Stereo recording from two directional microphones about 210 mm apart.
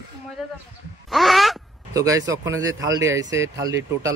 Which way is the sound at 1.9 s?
15° right (ahead or behind).